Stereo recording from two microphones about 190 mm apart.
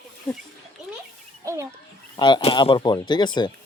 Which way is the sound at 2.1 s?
25° left (ahead or behind).